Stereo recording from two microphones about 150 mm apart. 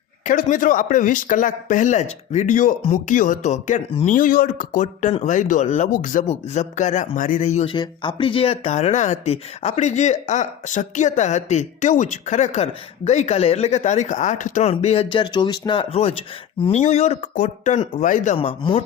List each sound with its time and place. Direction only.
0.3 s speech: 60° left (ahead or behind)
6.2 s speech: 45° left (ahead or behind)
7.7 s speech: 35° left (ahead or behind)
18.0 s speech: 60° left (ahead or behind)
18.3 s speech: 35° left (ahead or behind)